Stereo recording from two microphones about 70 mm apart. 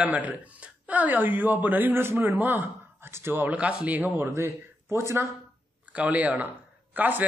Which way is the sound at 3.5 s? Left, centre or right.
Centre.